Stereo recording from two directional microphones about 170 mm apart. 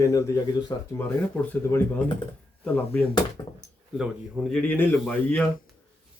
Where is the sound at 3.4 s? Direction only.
15° left (ahead or behind).